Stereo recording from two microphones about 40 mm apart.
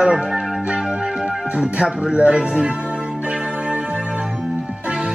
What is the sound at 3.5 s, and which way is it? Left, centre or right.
Music, right.